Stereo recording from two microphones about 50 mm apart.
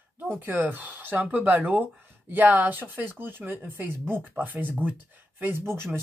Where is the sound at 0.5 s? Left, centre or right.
Right.